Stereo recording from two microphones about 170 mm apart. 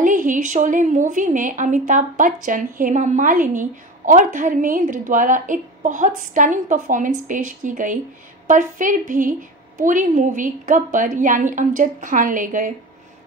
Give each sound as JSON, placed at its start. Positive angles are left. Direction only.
{"t": 0.0, "sound": "a woman's voice", "side_deg": -50}